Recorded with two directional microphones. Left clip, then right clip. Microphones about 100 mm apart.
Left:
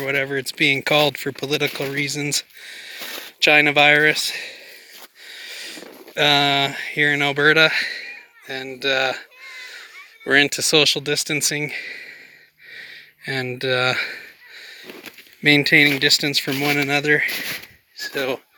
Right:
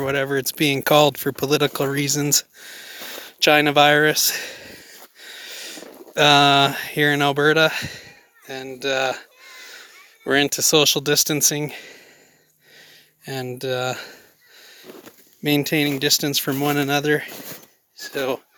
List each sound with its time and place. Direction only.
0.0 s speech: 55° right (ahead or behind); by 1.1 s 80° right
1.1 s speech: 50° right (ahead or behind)
1.5 s speech: 90° right
3.4 s speech: 60° right (ahead or behind)
5.3 s a sound: 80° right
6.1 s speech: 70° right (ahead or behind)
7.3 s a sound: 40° right (ahead or behind)
10.2 s speech: 40° right (ahead or behind)
10.8 s speech: 75° right (ahead or behind); by 11.9 s 40° right (ahead or behind)
12.7 s a sound: 20° right (ahead or behind)
15.4 s speech: 25° right (ahead or behind)
16.0 s speech: 40° right (ahead or behind)
17.2 s speech: centre (ahead or behind)
18.1 s speech: 35° right (ahead or behind)